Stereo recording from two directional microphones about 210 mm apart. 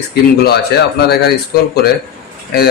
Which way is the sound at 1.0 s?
50° left (ahead or behind).